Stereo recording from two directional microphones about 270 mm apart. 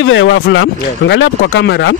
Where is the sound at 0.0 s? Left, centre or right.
Left.